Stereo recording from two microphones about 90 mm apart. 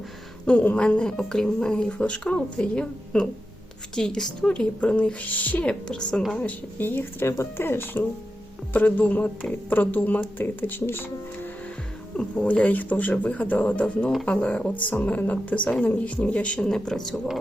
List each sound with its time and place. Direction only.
0.4 s speech: 15° left (ahead or behind)
12.1 s speech: 10° left (ahead or behind)